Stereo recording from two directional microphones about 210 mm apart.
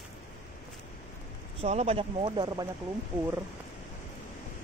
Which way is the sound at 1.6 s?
30° right (ahead or behind).